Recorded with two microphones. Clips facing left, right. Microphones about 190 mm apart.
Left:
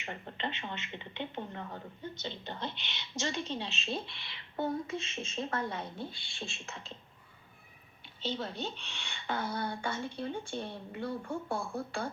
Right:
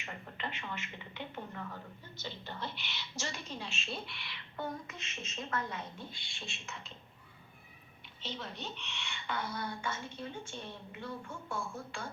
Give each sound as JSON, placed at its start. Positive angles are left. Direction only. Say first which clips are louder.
{"t": 0.0, "sound": "a woman's voice", "louder": "left 4 dB", "side_deg": 25}
{"t": 8.2, "sound": "a woman's voice", "louder": "left 7 dB", "side_deg": 30}